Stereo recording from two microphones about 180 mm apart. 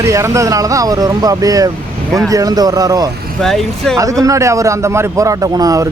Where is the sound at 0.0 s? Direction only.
15° right (ahead or behind).